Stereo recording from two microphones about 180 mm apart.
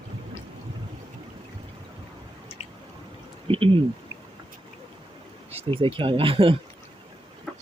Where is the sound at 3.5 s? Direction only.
30° right (ahead or behind).